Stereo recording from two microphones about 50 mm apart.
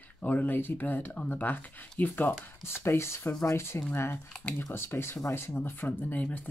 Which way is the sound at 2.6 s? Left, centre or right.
Left.